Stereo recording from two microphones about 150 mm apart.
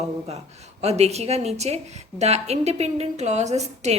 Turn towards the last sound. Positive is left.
turn(degrees=-50)  # may be behind; listen again after turning